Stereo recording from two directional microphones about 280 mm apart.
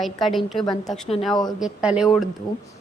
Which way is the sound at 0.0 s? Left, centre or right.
Centre.